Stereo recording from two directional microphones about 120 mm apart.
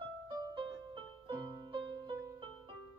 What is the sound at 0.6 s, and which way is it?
Music, 40° right (ahead or behind).